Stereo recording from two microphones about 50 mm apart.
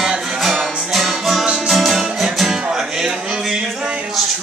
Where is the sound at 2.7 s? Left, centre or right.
Centre.